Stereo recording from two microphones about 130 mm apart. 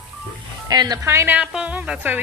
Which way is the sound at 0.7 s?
30° right (ahead or behind).